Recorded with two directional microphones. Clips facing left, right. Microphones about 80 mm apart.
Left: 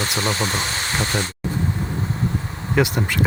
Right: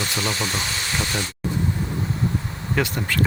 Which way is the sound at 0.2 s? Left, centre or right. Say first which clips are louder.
Left 4 dB; left.